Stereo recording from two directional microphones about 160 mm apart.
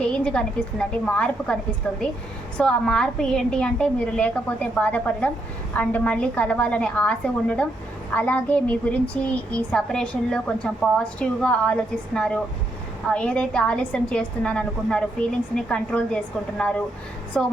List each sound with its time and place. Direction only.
0.0 s a woman's voice: 5° left (ahead or behind)
2.6 s a woman's voice: 5° left (ahead or behind)